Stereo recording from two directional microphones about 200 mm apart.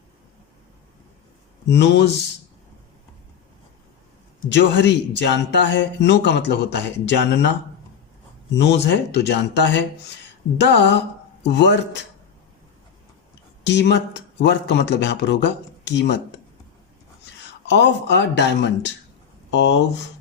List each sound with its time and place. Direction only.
1.6 s speech: 60° left (ahead or behind)
4.4 s speech: 65° left (ahead or behind)
8.5 s speech: 60° left (ahead or behind)
13.7 s speech: 60° left (ahead or behind)
17.7 s speech: 60° left (ahead or behind)